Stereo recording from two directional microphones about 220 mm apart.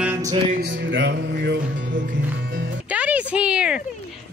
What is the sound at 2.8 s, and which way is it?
Music, 5° right (ahead or behind).